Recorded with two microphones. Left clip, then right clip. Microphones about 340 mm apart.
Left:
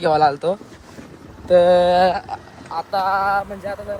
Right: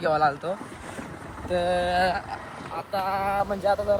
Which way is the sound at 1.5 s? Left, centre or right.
Centre.